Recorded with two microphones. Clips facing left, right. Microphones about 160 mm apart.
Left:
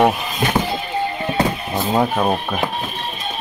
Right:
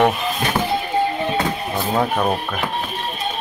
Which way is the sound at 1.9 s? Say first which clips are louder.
Left 2 dB; 10° left (ahead or behind).